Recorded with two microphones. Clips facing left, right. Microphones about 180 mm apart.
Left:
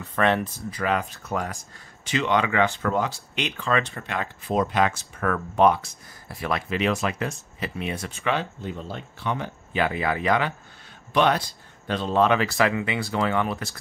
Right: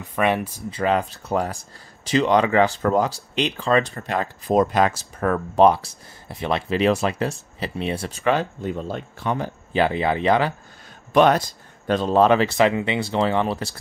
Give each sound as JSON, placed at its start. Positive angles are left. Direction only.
{"t": 0.0, "sound": "speech", "side_deg": -10}
{"t": 0.7, "sound": "speech", "side_deg": -30}
{"t": 11.1, "sound": "speech", "side_deg": -45}
{"t": 12.5, "sound": "speech", "side_deg": -25}